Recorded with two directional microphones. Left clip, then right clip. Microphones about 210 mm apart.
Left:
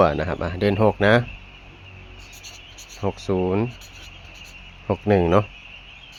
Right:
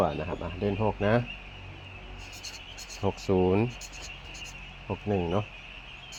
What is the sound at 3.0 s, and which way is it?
Speech, 10° left (ahead or behind).